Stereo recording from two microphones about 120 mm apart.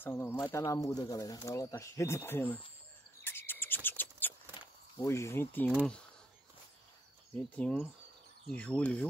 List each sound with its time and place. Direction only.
0.0 s speech: 20° left (ahead or behind)
3.3 s a sound: 20° left (ahead or behind)
4.9 s speech: 25° left (ahead or behind)
7.3 s speech: 10° left (ahead or behind)